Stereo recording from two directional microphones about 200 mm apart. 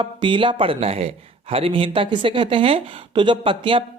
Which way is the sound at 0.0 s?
25° right (ahead or behind).